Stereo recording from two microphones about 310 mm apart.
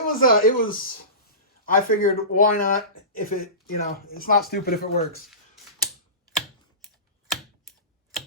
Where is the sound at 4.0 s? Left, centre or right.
Left.